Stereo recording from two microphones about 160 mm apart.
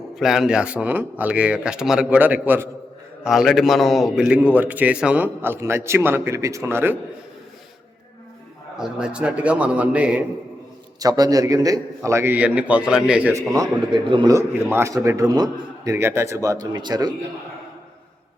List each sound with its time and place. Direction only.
0.2 s a man's voice: 5° right (ahead or behind)
8.8 s a man's voice: 5° right (ahead or behind)
11.0 s a man's voice: 20° right (ahead or behind); by 13.3 s 5° right (ahead or behind)
13.5 s a man's voice: 25° right (ahead or behind)